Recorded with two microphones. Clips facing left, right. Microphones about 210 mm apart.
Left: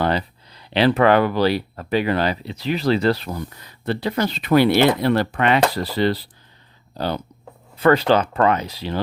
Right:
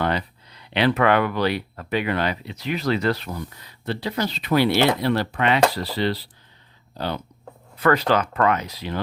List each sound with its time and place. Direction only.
0.0 s speech: 35° left (ahead or behind)
7.8 s speech: 30° left (ahead or behind)